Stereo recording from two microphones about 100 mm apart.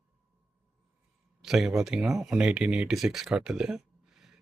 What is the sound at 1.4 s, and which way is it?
Speech, 5° right (ahead or behind).